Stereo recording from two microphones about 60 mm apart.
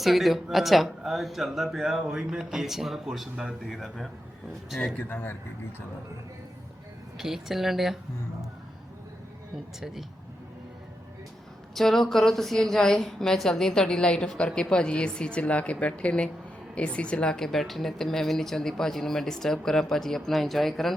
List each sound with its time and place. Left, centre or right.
0.0 s speech: centre
5.0 s a man's voice: left
7.2 s speech: centre
11.7 s a woman's voice: centre